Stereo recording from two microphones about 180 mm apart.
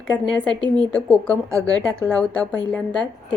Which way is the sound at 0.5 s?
25° right (ahead or behind).